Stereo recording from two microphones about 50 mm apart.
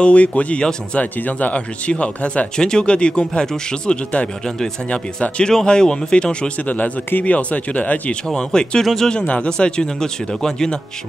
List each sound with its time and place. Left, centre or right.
0.0 s speech: left
5.5 s a man's voice: centre
6.7 s speech: left
8.4 s a man's voice: centre
9.1 s a man's voice: left